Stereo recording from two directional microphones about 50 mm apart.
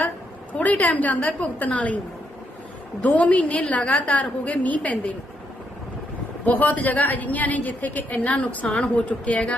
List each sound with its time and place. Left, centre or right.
0.6 s a woman's voice: left
3.0 s a woman's voice: left
6.4 s a woman's voice: left